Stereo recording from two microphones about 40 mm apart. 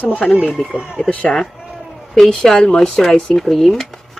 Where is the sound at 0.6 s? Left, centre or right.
Centre.